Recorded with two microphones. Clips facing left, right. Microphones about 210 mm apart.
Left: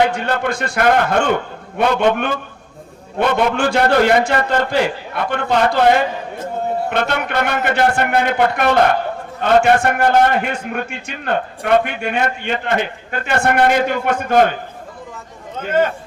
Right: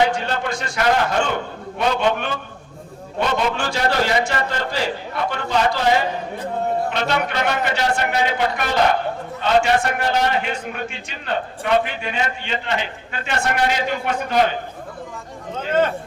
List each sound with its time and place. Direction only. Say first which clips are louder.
0.1 s a man's voice: left 3 dB; 55° left (ahead or behind)